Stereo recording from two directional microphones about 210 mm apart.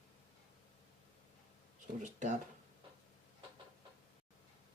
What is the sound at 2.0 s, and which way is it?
Speech, 35° right (ahead or behind).